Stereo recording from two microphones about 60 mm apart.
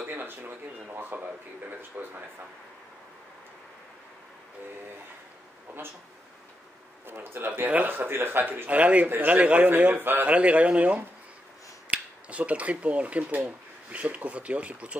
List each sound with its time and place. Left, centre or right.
0.0 s a sound: right
0.8 s a man's voice: right
7.1 s a man's voice: right
8.6 s speech: right